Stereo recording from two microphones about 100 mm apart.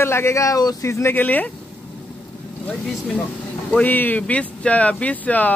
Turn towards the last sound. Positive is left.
turn(degrees=15)  # may be behind; listen again after turning